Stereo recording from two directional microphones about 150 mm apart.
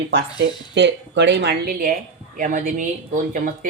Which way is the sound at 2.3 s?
65° right (ahead or behind).